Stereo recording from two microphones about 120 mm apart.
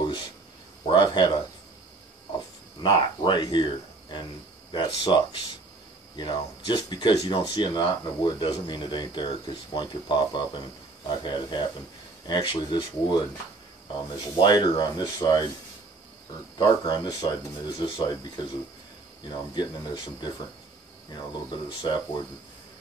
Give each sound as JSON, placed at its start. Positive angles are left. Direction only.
{"t": 0.0, "sound": "a sound", "side_deg": 40}
{"t": 0.8, "sound": "speech", "side_deg": 40}
{"t": 2.8, "sound": "speech", "side_deg": 40}
{"t": 16.5, "sound": "speech", "side_deg": 35}
{"t": 19.2, "sound": "speech", "side_deg": 40}